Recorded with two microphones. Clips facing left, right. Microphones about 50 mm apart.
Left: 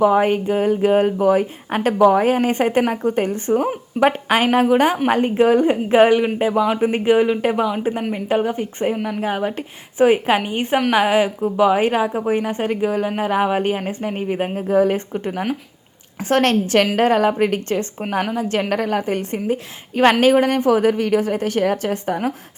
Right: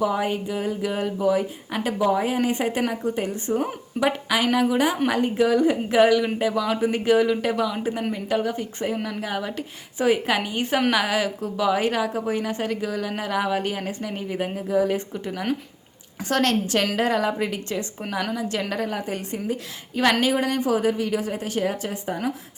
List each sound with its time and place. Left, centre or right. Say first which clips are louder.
0.0 s a woman's voice: left 8 dB; left